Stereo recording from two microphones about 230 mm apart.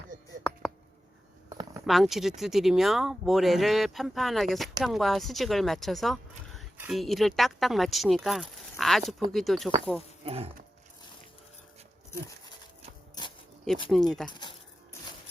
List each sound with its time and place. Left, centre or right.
1.9 s speech: centre
10.2 s dog: right
13.9 s speech: centre
14.3 s speech: centre